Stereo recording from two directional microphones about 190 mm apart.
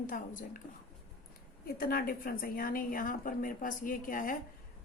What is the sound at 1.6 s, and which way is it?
A woman's voice, 50° left (ahead or behind).